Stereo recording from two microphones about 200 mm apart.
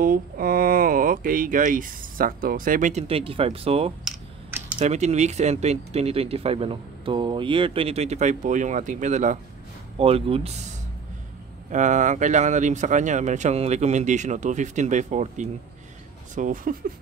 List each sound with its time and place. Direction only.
0.0 s speech: 45° right (ahead or behind); by 10.6 s 30° right (ahead or behind)
11.7 s speech: 40° right (ahead or behind)